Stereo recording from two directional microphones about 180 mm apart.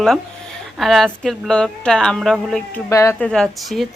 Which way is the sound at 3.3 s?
Centre (ahead or behind).